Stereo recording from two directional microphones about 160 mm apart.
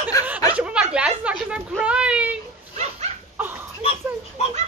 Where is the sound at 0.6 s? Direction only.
5° right (ahead or behind).